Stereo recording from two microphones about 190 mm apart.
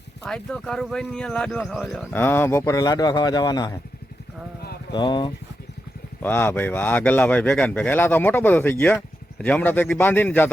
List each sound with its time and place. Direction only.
0.3 s speech: 5° left (ahead or behind); by 3.8 s 20° left (ahead or behind)
4.9 s speech: 25° left (ahead or behind)
6.2 s speech: 10° left (ahead or behind)